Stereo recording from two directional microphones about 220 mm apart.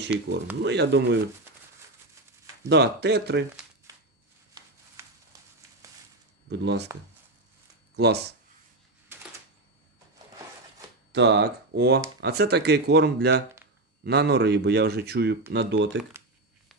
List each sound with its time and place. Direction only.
0.1 s speech: 55° right (ahead or behind)
2.7 s speech: 50° right (ahead or behind)
5.0 s a sound: 10° right (ahead or behind)
6.9 s speech: 15° right (ahead or behind)
7.9 s speech: 50° right (ahead or behind)
11.1 s speech: 50° right (ahead or behind)